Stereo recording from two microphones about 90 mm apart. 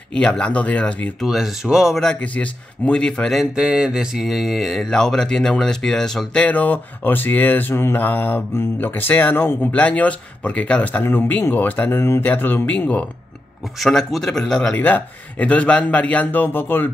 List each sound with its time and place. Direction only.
0.1 s speech: 10° left (ahead or behind)
1.2 s speech: 5° right (ahead or behind)
2.0 s speech: 10° left (ahead or behind)
3.5 s speech: 10° right (ahead or behind); by 13.0 s 15° left (ahead or behind)
13.7 s speech: centre (ahead or behind)
14.7 s speech: 20° left (ahead or behind)